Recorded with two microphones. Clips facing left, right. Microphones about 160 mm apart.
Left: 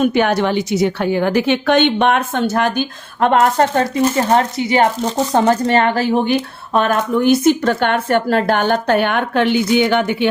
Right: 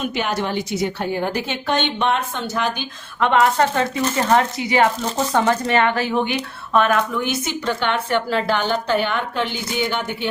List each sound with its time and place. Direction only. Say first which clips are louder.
0.0 s a woman's voice: left 8 dB; 55° left (ahead or behind)
4.3 s speech: left 3 dB; 30° left (ahead or behind); by 10.2 s 75° left (ahead or behind)